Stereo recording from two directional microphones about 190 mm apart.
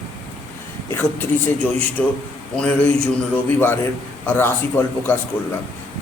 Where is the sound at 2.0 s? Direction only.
5° left (ahead or behind).